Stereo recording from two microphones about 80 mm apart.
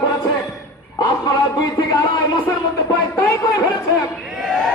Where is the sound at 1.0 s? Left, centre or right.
Left.